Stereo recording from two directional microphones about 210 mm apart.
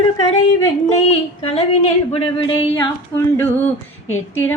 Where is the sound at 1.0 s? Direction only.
30° left (ahead or behind).